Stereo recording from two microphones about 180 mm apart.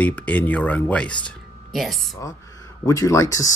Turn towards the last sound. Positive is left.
turn(degrees=20)  # may be behind; listen again after turning